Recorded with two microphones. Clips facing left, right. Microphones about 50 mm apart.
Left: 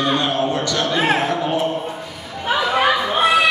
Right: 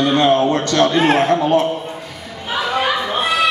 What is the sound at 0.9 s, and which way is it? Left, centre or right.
Speech, centre.